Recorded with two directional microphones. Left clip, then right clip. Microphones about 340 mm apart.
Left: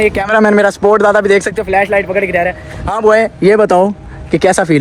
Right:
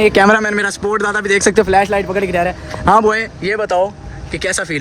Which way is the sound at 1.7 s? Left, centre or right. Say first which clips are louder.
Left 2 dB; centre.